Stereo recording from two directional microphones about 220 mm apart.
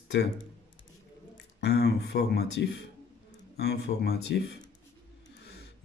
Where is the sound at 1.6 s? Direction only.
50° left (ahead or behind).